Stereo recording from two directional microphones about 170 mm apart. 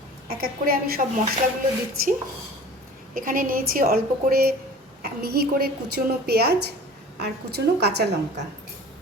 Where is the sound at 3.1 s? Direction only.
55° right (ahead or behind); by 8.1 s 75° right (ahead or behind).